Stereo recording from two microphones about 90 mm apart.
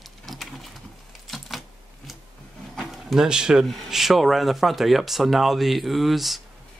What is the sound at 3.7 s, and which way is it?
Speech, centre (ahead or behind).